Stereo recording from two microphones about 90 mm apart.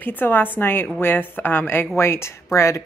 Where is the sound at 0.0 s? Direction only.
20° left (ahead or behind).